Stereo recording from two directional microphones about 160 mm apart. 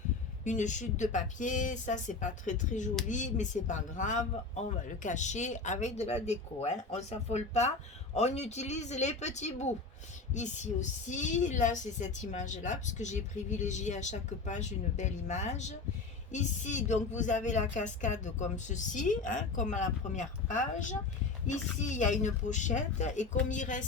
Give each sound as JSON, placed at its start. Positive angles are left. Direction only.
{"t": 0.4, "sound": "speech", "side_deg": 50}